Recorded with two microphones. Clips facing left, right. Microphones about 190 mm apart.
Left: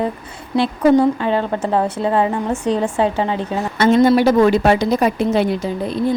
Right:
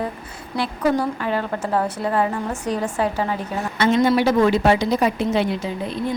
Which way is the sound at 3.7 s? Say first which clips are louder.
Left 5 dB; 40° left (ahead or behind).